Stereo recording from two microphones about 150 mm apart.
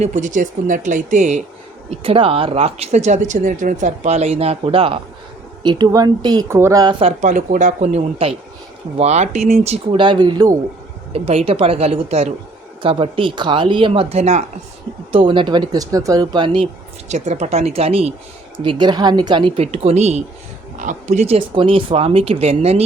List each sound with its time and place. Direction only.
0.0 s speech: 55° right (ahead or behind)
1.9 s speech: 40° right (ahead or behind); by 6.9 s 20° right (ahead or behind)
7.0 s speech: 55° right (ahead or behind); by 10.6 s 25° right (ahead or behind)
11.1 s speech: 45° right (ahead or behind)
15.1 s speech: 35° right (ahead or behind)
17.1 s speech: 50° right (ahead or behind)